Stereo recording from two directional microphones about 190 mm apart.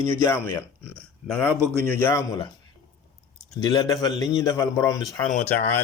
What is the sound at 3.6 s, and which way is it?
A man's voice, 20° left (ahead or behind).